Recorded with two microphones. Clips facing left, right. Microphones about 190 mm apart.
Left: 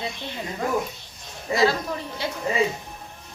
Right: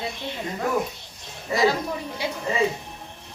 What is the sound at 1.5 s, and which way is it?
Speech, 15° right (ahead or behind).